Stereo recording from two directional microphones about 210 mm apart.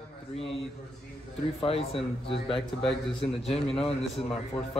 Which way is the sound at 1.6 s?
25° left (ahead or behind).